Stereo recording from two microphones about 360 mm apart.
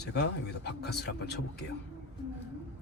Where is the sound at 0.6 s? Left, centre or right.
Left.